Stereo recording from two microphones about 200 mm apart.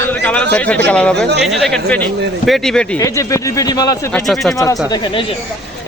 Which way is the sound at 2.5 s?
Centre (ahead or behind).